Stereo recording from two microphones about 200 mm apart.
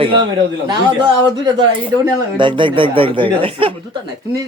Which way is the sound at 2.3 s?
25° right (ahead or behind).